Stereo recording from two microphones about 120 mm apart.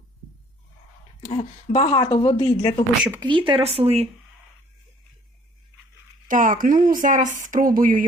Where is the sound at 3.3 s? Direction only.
45° right (ahead or behind).